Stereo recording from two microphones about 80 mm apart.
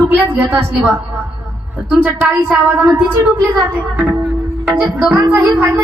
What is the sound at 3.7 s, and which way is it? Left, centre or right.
Speech, right.